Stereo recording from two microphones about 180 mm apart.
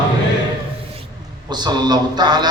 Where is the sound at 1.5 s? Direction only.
25° right (ahead or behind).